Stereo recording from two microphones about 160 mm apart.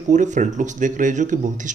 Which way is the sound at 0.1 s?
50° right (ahead or behind).